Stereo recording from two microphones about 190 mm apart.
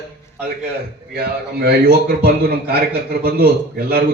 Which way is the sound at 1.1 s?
55° right (ahead or behind).